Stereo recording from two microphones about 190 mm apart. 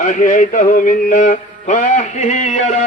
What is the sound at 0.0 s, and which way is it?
Music, 45° left (ahead or behind).